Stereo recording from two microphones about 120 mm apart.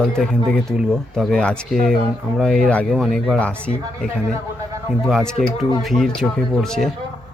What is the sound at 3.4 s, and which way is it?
Speech, 10° left (ahead or behind).